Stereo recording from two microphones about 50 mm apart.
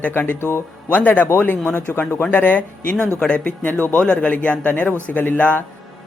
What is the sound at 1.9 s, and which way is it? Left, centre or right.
A man's voice, left.